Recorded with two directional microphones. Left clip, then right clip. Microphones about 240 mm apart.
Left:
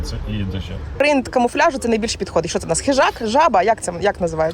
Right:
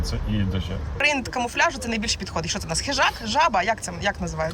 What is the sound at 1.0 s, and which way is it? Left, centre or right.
Speech, centre.